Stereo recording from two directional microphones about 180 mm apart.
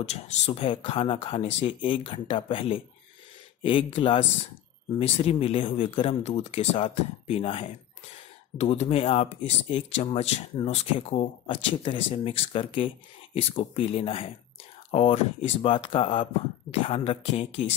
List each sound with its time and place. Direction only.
0.0 s speech: 40° left (ahead or behind)